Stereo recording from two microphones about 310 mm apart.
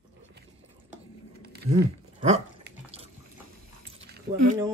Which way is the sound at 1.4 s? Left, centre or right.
Right.